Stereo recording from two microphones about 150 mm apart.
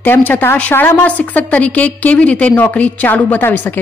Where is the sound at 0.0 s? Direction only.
15° left (ahead or behind).